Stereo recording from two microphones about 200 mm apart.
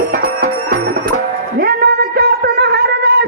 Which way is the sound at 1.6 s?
50° right (ahead or behind).